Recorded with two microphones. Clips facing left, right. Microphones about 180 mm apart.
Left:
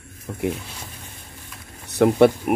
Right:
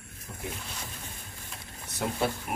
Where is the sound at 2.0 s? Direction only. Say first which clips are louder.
Left 15 dB; 70° left (ahead or behind).